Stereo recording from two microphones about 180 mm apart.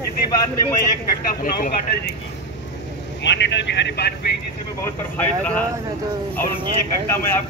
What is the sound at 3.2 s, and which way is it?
Speech, 75° left (ahead or behind).